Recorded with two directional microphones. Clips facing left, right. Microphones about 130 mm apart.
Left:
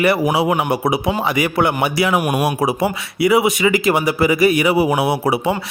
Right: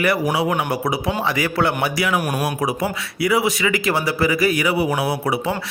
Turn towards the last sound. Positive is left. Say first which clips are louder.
# left 4 dB
turn(degrees=25)  # may be behind; listen again after turning